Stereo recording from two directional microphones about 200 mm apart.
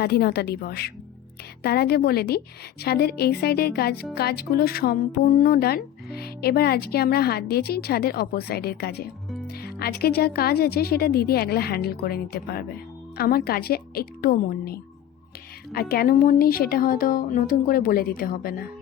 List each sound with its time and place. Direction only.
0.0 s speech: 50° left (ahead or behind)